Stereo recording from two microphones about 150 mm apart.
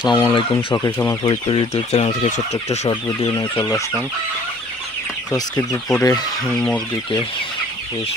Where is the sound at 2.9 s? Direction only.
30° left (ahead or behind).